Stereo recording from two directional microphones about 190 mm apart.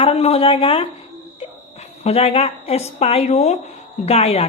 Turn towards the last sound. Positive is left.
turn(degrees=35)  # may be behind; listen again after turning